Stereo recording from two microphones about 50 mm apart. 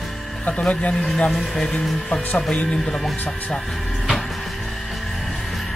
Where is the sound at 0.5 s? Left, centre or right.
Left.